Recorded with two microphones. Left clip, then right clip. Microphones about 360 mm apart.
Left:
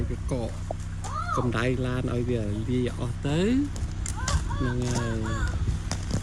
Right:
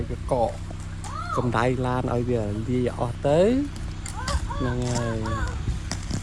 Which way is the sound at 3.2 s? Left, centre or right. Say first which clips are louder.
Right 8 dB; centre.